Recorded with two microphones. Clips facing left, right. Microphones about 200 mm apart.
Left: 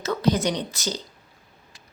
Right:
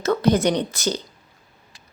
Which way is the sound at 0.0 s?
55° right (ahead or behind).